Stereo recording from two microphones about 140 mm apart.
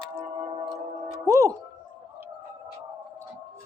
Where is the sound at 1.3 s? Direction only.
20° right (ahead or behind).